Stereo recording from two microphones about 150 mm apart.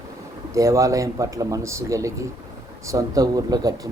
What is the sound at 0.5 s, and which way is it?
Speech, 20° right (ahead or behind).